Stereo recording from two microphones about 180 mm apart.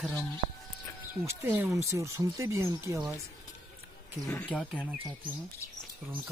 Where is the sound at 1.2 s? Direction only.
15° right (ahead or behind).